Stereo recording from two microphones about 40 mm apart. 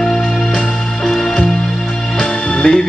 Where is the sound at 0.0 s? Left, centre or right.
Centre.